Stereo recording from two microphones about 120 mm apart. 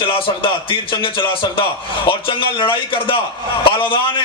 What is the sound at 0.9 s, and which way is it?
Speech, 45° left (ahead or behind).